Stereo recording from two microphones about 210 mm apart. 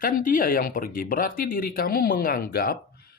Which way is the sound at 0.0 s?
40° left (ahead or behind).